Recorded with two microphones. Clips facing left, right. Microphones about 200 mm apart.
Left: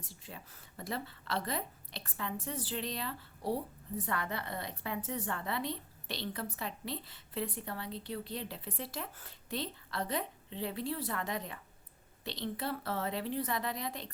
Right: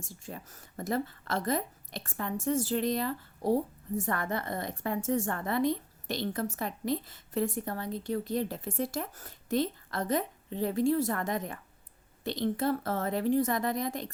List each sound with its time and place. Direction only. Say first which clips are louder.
0.0 s a woman's voice: right 7 dB; 45° right (ahead or behind)